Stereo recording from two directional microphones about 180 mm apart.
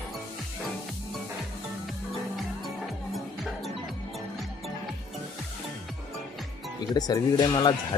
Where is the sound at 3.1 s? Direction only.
Centre (ahead or behind).